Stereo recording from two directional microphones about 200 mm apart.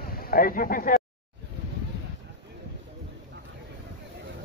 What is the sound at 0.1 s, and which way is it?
Speech, 45° left (ahead or behind).